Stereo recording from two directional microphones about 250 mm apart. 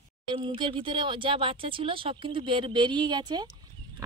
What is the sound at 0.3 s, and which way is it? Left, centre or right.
Speech, right.